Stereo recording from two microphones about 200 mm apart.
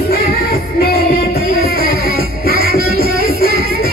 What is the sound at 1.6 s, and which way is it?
Music, 50° right (ahead or behind).